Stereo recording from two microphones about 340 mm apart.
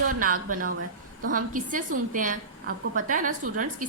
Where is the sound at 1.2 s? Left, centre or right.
Right.